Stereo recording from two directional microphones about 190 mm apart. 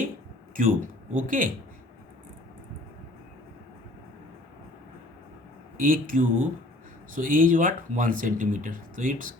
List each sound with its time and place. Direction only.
0.5 s speech: 45° right (ahead or behind)
5.7 s speech: 45° right (ahead or behind)